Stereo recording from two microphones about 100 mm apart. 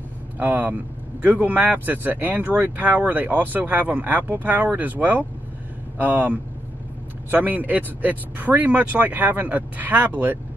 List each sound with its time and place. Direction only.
0.4 s speech: 20° right (ahead or behind)